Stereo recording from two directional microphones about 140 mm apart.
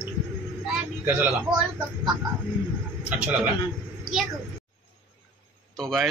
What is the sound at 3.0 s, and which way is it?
Speech, 10° right (ahead or behind).